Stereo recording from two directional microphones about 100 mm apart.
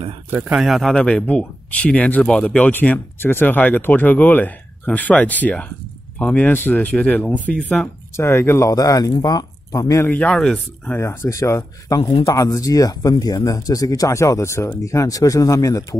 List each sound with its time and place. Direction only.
0.3 s speech: 15° right (ahead or behind)
0.6 s speech: centre (ahead or behind)
0.9 s speech: 10° left (ahead or behind)
8.2 s speech: 25° left (ahead or behind)
10.0 s speech: 15° left (ahead or behind)
11.0 s speech: 25° left (ahead or behind)
12.0 s speech: 65° left (ahead or behind)
12.3 s speech: 35° left (ahead or behind)